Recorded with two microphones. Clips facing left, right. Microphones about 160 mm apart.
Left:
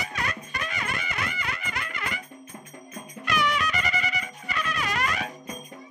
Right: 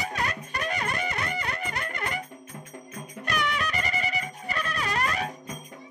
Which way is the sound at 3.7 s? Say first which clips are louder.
Even; 40° right (ahead or behind).